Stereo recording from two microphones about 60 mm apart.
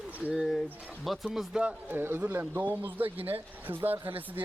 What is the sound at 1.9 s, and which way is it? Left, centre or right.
A man's voice, right.